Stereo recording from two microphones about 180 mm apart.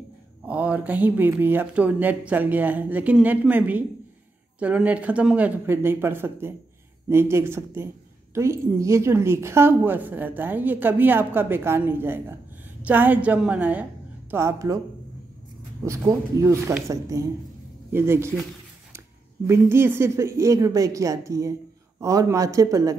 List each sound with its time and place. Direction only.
0.5 s a woman's voice: 10° right (ahead or behind)
15.8 s a woman's voice: 15° right (ahead or behind)
19.4 s a woman's voice: 15° right (ahead or behind)